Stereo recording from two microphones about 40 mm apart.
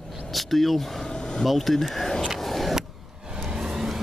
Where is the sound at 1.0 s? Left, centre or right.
Centre.